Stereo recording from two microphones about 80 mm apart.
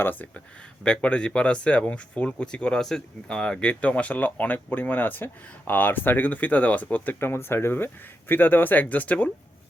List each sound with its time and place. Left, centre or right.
0.0 s speech: left